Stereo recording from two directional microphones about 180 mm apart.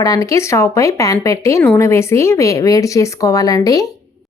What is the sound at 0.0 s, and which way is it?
Speech, 20° left (ahead or behind).